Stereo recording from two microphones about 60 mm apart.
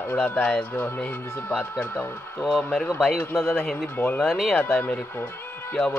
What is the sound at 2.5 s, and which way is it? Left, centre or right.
Speech, centre.